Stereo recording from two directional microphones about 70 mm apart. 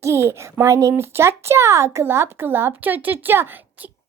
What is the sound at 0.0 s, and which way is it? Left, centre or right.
A child's voice, right.